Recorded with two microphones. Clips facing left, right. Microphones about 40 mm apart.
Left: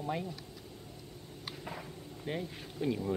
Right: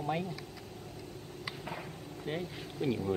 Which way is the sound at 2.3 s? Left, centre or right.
Centre.